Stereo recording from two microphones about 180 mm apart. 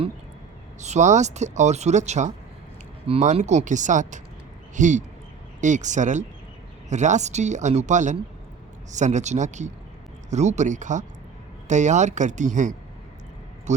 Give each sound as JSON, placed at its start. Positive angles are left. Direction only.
{"t": 0.8, "sound": "speech", "side_deg": -40}